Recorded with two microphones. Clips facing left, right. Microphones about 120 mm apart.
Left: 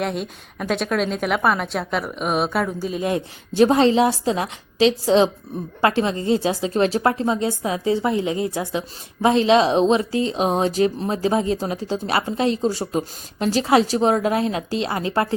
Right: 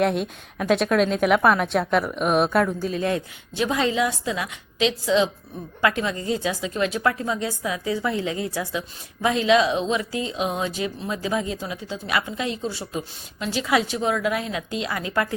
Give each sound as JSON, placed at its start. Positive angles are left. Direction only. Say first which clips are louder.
{"t": 0.0, "sound": "a woman's voice", "louder": "right 3 dB", "side_deg": 0}
{"t": 2.6, "sound": "a woman's voice", "louder": "left 1 dB", "side_deg": 10}
{"t": 3.5, "sound": "a woman's voice", "louder": "left 8 dB", "side_deg": 35}